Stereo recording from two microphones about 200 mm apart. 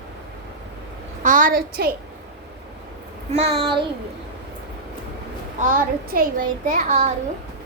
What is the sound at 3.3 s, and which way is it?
Speech, 30° right (ahead or behind).